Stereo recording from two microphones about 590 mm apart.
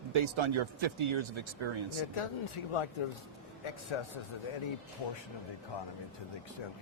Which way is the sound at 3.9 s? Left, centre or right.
Left.